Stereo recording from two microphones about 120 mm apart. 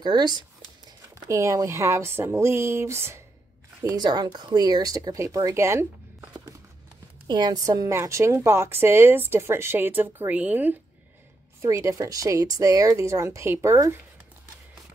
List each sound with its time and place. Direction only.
0.0 s speech: 35° right (ahead or behind)
1.1 s a woman's voice: 25° right (ahead or behind)
3.9 s speech: 35° right (ahead or behind)
7.2 s a woman's voice: 35° right (ahead or behind); by 10.8 s 15° right (ahead or behind)
11.6 s a woman's voice: 25° right (ahead or behind)